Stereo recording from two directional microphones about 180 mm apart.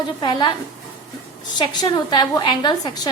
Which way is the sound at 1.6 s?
25° left (ahead or behind).